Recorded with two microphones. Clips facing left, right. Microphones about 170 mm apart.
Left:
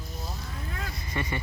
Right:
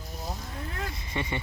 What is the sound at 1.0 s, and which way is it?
Speech, 25° right (ahead or behind).